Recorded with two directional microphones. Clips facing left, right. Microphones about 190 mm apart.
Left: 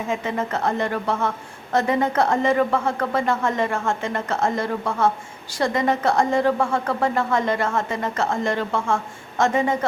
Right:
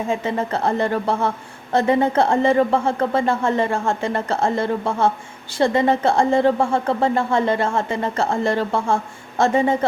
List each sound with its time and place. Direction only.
0.1 s speech: 30° right (ahead or behind)